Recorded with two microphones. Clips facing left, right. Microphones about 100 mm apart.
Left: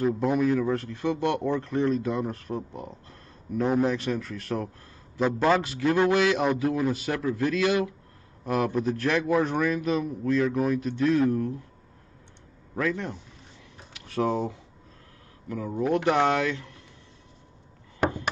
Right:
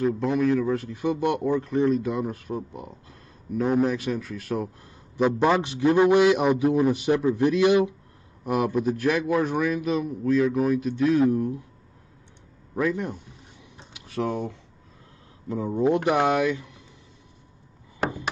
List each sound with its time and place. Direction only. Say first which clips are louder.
0.0 s a man's voice: right 1 dB; 5° left (ahead or behind); by 7.9 s 20° right (ahead or behind)
8.5 s a man's voice: right 2 dB; 10° right (ahead or behind)
12.7 s speech: right 3 dB; 15° right (ahead or behind)
14.0 s speech: left 2 dB; centre (ahead or behind)
15.4 s speech: right 5 dB; 25° right (ahead or behind)